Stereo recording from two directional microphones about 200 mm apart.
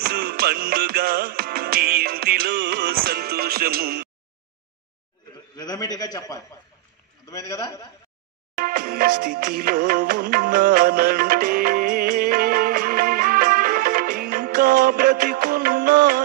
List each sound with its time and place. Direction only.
0.0 s music: 50° right (ahead or behind)
5.6 s a man's voice: 20° left (ahead or behind)
8.5 s music of bollywood: 50° right (ahead or behind)